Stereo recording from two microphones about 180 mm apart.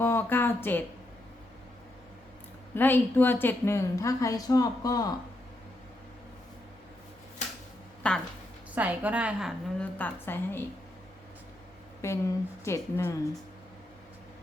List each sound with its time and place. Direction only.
0.0 s speech: 10° left (ahead or behind)
2.7 s a woman's voice: 10° left (ahead or behind)
8.0 s a woman's voice: 5° left (ahead or behind)
8.7 s a woman's voice: 10° right (ahead or behind)
10.0 s a woman's voice: 10° left (ahead or behind)
12.0 s a woman's voice: 15° left (ahead or behind)